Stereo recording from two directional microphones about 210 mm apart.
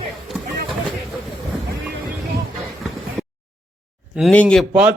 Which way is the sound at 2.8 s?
Centre (ahead or behind).